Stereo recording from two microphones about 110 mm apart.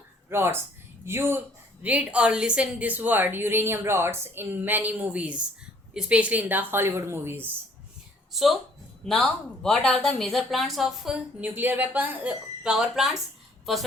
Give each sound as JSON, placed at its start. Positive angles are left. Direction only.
{"t": 0.3, "sound": "a woman's voice", "side_deg": -20}
{"t": 8.3, "sound": "a woman's voice", "side_deg": 0}